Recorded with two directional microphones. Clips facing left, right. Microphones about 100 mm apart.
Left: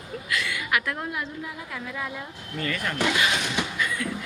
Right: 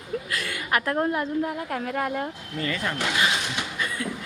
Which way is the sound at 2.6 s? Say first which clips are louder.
Right 1 dB; 25° right (ahead or behind).